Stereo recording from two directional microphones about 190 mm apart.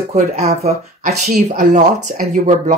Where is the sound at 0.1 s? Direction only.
35° right (ahead or behind).